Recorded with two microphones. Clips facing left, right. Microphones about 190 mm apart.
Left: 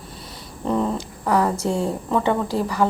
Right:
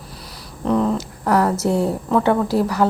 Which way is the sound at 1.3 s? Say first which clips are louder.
Right 3 dB; 10° right (ahead or behind).